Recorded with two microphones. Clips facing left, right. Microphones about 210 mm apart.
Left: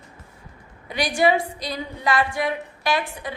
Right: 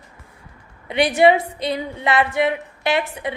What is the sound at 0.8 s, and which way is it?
A woman's voice, 25° right (ahead or behind).